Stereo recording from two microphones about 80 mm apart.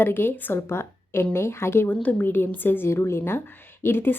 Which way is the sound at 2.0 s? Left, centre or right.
Centre.